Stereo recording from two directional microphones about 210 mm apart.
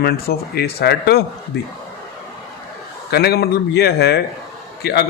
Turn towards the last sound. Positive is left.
turn(degrees=50)  # may be behind; listen again after turning